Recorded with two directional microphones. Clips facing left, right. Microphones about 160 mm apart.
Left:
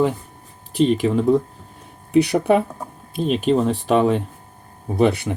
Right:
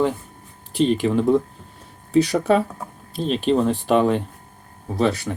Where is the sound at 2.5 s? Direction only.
15° left (ahead or behind).